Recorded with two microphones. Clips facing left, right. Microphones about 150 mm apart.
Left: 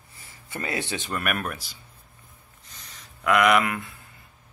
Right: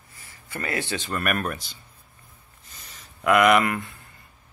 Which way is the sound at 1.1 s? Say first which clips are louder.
Right 2 dB; 5° left (ahead or behind).